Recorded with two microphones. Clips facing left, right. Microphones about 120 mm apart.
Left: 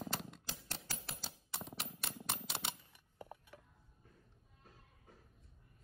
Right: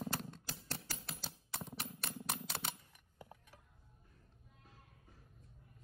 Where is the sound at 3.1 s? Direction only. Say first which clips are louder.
Left 4 dB; 50° left (ahead or behind).